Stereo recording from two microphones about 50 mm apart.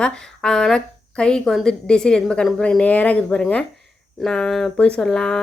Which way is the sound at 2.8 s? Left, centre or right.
Left.